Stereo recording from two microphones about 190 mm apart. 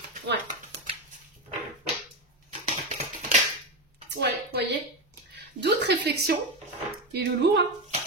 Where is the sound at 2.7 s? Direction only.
40° right (ahead or behind).